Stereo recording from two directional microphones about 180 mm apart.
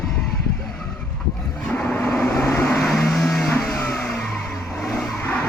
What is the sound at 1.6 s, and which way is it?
Vehicle, 5° left (ahead or behind).